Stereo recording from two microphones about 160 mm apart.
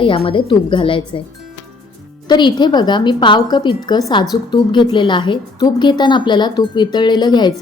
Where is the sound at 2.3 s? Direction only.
25° left (ahead or behind).